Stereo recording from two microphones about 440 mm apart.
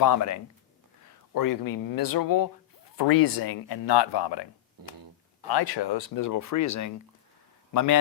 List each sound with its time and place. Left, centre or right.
0.0 s speech: left
4.8 s speech: right
5.5 s a man's voice: left